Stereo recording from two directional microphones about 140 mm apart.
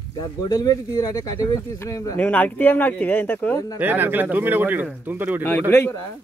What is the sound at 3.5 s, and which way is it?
Speech, 25° left (ahead or behind).